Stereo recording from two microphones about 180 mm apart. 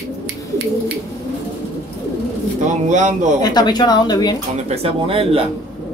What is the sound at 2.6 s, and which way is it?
Speech, 45° right (ahead or behind).